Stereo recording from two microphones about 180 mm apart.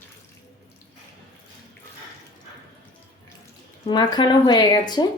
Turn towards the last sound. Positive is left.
turn(degrees=25)  # may be behind; listen again after turning